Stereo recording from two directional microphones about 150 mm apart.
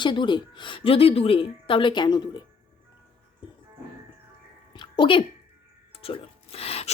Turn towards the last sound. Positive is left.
turn(degrees=40)  # may be behind; listen again after turning